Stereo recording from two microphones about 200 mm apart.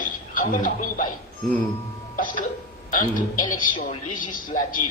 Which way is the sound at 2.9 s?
40° left (ahead or behind).